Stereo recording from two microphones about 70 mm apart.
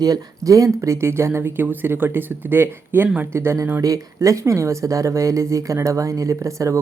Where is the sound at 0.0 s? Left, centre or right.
Right.